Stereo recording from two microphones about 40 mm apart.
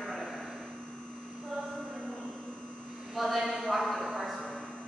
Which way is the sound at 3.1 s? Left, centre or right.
Centre.